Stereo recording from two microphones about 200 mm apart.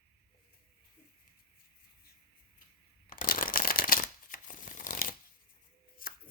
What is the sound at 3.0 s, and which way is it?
Shuffling cards, 45° left (ahead or behind).